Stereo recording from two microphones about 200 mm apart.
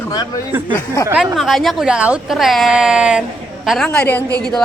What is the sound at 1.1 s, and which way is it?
Speech, 10° right (ahead or behind).